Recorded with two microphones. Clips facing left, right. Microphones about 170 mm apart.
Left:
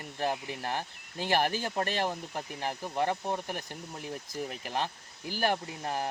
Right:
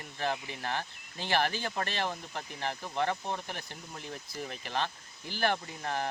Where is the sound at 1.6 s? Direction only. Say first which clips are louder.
Left 3 dB; 45° left (ahead or behind).